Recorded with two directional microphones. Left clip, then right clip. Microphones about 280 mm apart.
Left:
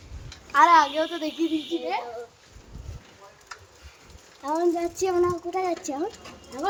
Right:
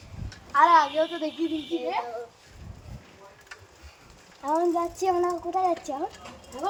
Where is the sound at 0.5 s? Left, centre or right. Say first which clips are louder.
Left 1 dB; left.